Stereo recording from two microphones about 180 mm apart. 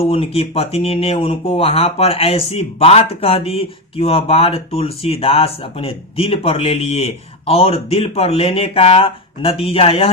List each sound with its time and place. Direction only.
0.1 s speech: 30° left (ahead or behind)